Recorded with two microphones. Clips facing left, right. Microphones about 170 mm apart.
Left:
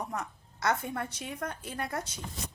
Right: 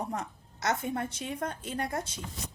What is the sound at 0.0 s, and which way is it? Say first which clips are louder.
A woman's voice: right 2 dB; 30° right (ahead or behind).